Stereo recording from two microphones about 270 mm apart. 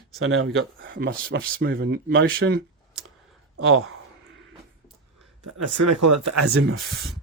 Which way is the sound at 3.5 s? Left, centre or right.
Right.